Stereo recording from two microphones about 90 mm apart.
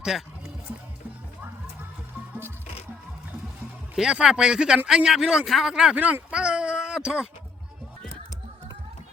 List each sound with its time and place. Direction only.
0.0 s speech: 5° right (ahead or behind)
3.9 s a man's voice: 5° right (ahead or behind)